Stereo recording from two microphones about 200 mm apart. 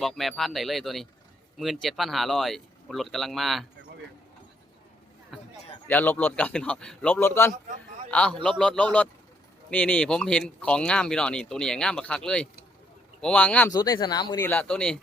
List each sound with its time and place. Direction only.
0.0 s speech: centre (ahead or behind)
5.3 s a sound: centre (ahead or behind)
5.9 s a man's voice: 10° left (ahead or behind)
13.7 s speech: 20° left (ahead or behind)
14.4 s a man's voice: 10° left (ahead or behind)